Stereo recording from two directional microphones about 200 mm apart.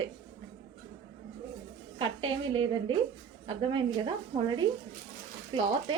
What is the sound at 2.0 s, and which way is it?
A woman's voice, 25° right (ahead or behind).